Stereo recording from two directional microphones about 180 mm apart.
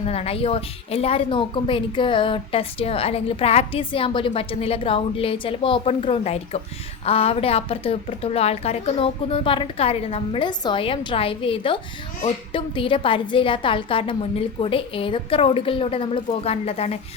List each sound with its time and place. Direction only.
0.0 s a woman's voice: 35° left (ahead or behind)